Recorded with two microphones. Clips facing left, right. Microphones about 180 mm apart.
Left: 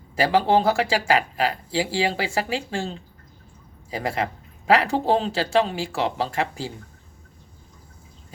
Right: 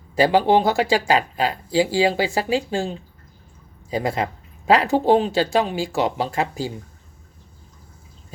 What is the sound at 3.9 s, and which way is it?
Speech, 20° right (ahead or behind).